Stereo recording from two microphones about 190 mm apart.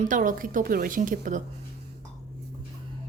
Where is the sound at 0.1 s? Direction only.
45° right (ahead or behind).